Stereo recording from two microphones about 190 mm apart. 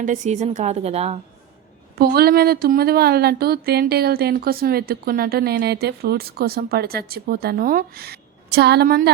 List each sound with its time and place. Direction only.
0.0 s a woman's voice: 40° right (ahead or behind)
2.0 s speech: 55° right (ahead or behind)